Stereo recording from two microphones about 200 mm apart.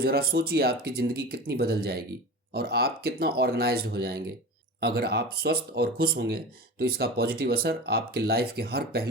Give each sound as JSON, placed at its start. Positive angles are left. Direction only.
{"t": 0.0, "sound": "speech", "side_deg": -50}